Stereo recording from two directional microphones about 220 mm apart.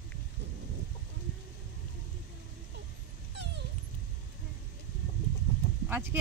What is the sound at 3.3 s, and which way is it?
Dog, 50° right (ahead or behind).